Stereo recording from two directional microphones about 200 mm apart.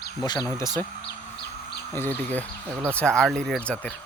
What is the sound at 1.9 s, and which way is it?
Speech, 10° left (ahead or behind).